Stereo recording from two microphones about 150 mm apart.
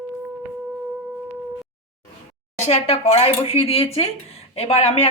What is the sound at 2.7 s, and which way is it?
Speech, 45° left (ahead or behind).